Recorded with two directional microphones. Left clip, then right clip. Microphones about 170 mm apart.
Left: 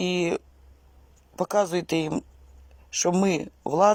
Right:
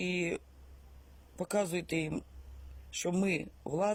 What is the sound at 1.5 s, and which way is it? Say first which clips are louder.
Speech: left 9 dB; 60° left (ahead or behind).